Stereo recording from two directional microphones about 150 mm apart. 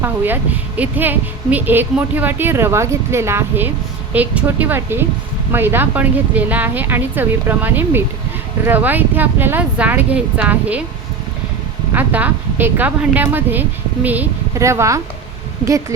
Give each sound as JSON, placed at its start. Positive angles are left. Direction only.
{"t": 0.0, "sound": "a woman's voice", "side_deg": -10}
{"t": 11.9, "sound": "a woman's voice", "side_deg": -10}